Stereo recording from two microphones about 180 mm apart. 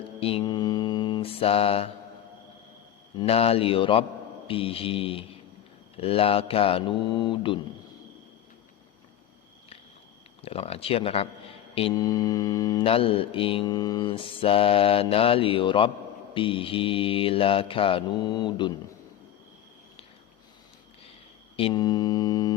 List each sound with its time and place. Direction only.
0.2 s mantra: 30° left (ahead or behind)
3.2 s mantra: 35° left (ahead or behind)
10.4 s mantra: 35° left (ahead or behind)
21.5 s mantra: 25° left (ahead or behind)